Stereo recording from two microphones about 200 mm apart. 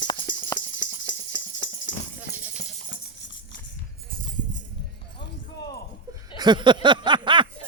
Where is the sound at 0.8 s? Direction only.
65° left (ahead or behind).